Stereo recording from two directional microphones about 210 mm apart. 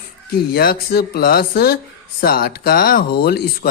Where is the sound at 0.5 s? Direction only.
45° left (ahead or behind).